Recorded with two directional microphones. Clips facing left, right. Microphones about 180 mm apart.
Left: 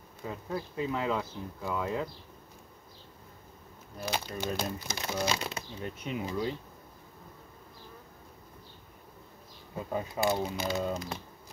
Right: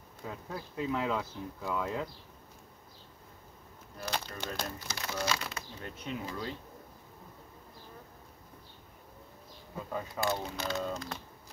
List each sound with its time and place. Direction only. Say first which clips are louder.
0.2 s speech: left 5 dB; centre (ahead or behind)
4.0 s a sound: left 3 dB; 5° left (ahead or behind)
4.4 s speech: left 5 dB; 10° left (ahead or behind)
9.8 s speech: left 4 dB; 20° left (ahead or behind)